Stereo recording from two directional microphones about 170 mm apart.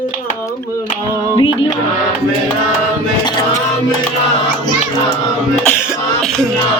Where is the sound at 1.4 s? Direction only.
30° left (ahead or behind).